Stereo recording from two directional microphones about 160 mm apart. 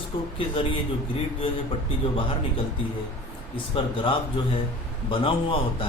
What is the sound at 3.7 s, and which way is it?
A man's voice, 30° left (ahead or behind).